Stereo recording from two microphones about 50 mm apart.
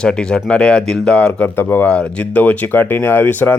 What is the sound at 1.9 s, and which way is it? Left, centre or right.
Speech, left.